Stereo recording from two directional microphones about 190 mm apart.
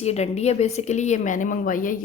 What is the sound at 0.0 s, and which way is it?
A woman's voice, 35° left (ahead or behind).